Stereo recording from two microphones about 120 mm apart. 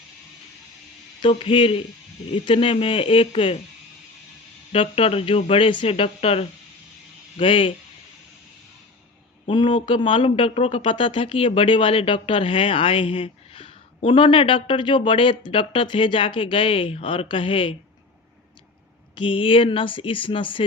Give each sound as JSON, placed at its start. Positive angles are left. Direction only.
{"t": 1.2, "sound": "a man's voice", "side_deg": 50}
{"t": 4.7, "sound": "a man's voice", "side_deg": 50}
{"t": 9.5, "sound": "a man's voice", "side_deg": 45}
{"t": 19.1, "sound": "a man's voice", "side_deg": 45}